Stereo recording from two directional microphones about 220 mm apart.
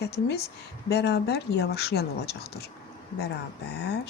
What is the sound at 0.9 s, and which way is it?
Speech, 50° left (ahead or behind).